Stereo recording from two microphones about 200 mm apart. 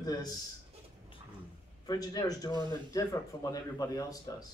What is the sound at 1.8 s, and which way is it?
A man's voice, 20° left (ahead or behind).